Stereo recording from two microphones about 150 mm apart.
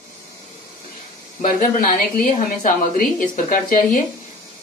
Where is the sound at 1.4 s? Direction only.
65° left (ahead or behind).